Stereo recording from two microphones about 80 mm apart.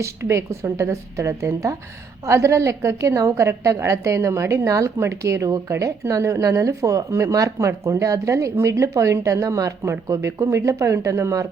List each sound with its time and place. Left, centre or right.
0.0 s a woman's voice: right